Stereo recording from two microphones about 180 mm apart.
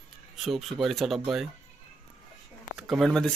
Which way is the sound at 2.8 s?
Centre (ahead or behind).